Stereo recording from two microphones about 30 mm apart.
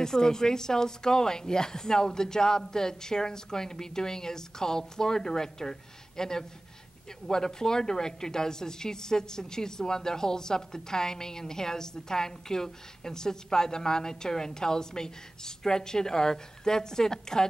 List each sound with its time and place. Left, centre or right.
0.0 s a woman's voice: left